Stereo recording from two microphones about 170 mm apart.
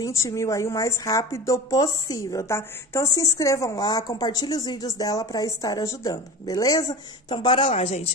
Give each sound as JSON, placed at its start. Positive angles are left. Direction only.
{"t": 0.0, "sound": "a woman's voice", "side_deg": 15}